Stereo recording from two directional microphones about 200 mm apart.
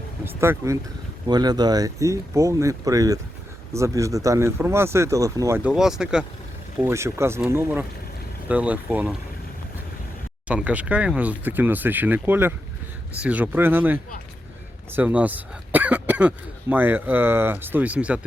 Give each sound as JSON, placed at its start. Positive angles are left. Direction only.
{"t": 0.3, "sound": "speech", "side_deg": -15}
{"t": 10.5, "sound": "speech", "side_deg": -5}